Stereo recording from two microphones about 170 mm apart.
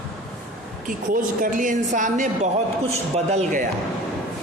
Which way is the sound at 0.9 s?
55° right (ahead or behind).